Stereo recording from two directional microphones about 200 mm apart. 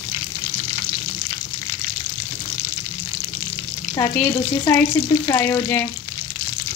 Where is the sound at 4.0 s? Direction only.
10° left (ahead or behind).